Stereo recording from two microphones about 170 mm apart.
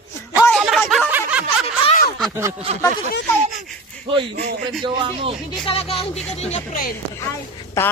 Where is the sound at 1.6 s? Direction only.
35° left (ahead or behind).